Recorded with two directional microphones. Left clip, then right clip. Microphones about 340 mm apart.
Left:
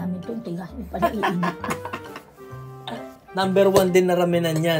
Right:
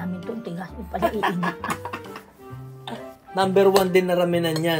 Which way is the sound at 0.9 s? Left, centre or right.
Centre.